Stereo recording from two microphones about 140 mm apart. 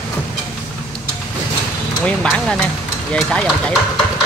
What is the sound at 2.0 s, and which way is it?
Speech, 5° left (ahead or behind).